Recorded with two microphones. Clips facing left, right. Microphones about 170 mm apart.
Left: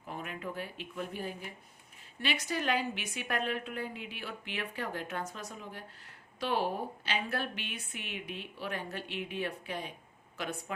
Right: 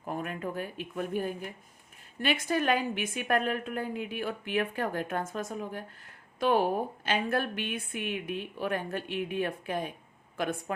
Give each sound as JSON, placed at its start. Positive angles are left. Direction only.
{"t": 0.0, "sound": "a woman's voice", "side_deg": -45}